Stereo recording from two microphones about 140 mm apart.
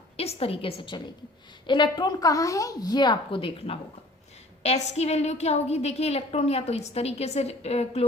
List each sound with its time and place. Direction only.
0.2 s a woman's voice: 45° left (ahead or behind)